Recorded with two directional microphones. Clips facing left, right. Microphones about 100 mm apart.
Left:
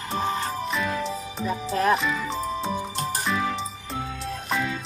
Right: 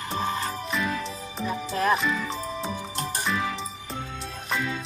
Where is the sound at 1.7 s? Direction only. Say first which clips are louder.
Left 2 dB; 35° left (ahead or behind).